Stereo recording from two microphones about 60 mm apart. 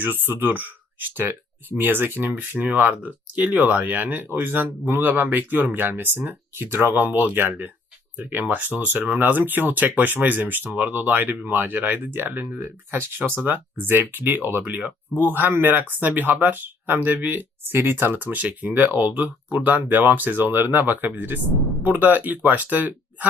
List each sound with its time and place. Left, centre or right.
0.0 s speech: right